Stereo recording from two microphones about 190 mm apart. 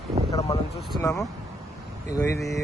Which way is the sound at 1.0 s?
15° left (ahead or behind).